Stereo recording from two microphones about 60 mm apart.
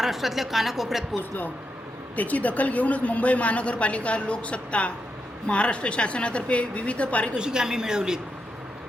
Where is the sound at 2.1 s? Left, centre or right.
Left.